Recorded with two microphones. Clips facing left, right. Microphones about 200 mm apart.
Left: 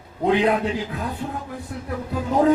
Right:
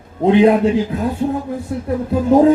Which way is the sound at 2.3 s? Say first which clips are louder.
Right 8 dB; 25° right (ahead or behind).